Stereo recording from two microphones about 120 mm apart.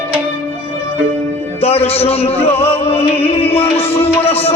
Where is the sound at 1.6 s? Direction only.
55° left (ahead or behind).